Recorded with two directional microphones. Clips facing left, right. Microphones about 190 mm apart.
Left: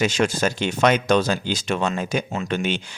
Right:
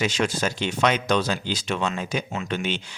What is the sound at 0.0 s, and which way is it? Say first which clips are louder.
Speech: left 4 dB; 45° left (ahead or behind).